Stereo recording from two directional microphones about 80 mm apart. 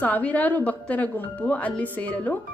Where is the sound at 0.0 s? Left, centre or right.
Centre.